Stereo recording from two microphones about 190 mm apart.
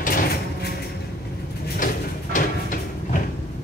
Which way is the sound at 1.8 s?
45° left (ahead or behind).